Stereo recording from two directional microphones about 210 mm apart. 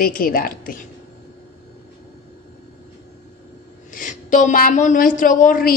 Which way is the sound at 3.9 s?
40° left (ahead or behind).